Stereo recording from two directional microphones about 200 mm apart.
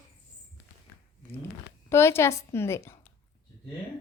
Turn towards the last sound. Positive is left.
turn(degrees=10)  # may be behind; listen again after turning